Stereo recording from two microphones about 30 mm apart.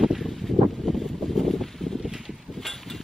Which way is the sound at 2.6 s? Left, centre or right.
Centre.